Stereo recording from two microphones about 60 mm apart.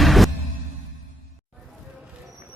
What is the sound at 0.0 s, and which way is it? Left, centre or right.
Music, centre.